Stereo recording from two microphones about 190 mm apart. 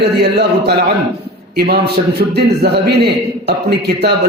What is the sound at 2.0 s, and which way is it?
Speech, 35° right (ahead or behind).